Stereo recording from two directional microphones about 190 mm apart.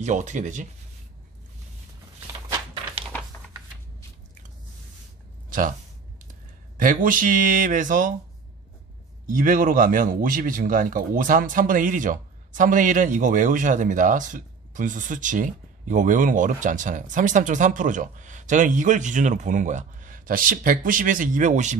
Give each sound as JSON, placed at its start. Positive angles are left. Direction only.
{"t": 0.0, "sound": "speech", "side_deg": -40}
{"t": 2.5, "sound": "a sound", "side_deg": -25}
{"t": 5.5, "sound": "speech", "side_deg": -45}
{"t": 6.8, "sound": "a man's voice", "side_deg": -45}
{"t": 9.3, "sound": "a man's voice", "side_deg": -45}